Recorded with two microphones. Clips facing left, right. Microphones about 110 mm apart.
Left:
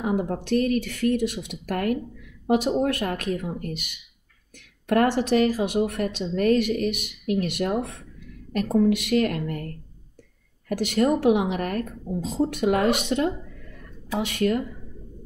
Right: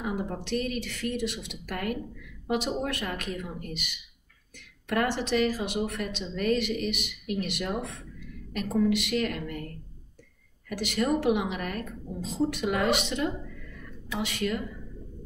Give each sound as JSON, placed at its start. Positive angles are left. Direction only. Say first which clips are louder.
{"t": 0.0, "sound": "a woman's voice", "louder": "left 7 dB", "side_deg": 50}
{"t": 13.7, "sound": "a sound", "louder": "left 6 dB", "side_deg": 35}
{"t": 14.2, "sound": "a woman's voice", "louder": "left 6 dB", "side_deg": 50}